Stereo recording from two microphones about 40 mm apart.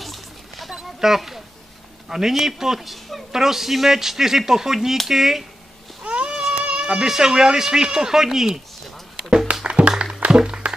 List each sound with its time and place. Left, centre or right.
0.0 s music: centre
0.7 s a sound: centre
2.0 s speech: centre
6.0 s a sound: right
6.6 s speech: right
9.5 s music: right